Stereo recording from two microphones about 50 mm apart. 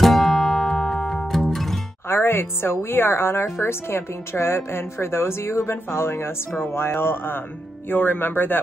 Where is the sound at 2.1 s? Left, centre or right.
Left.